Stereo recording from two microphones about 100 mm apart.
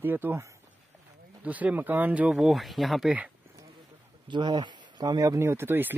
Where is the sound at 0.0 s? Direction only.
20° right (ahead or behind); by 3.1 s centre (ahead or behind).